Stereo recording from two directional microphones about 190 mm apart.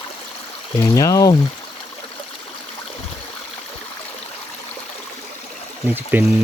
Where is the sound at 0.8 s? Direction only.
15° left (ahead or behind).